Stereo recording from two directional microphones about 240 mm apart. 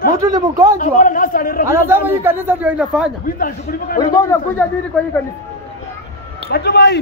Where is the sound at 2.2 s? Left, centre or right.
Centre.